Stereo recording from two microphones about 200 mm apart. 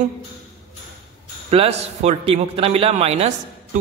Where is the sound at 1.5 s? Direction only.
30° right (ahead or behind).